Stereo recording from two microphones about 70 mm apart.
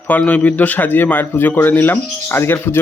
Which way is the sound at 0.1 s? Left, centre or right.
Left.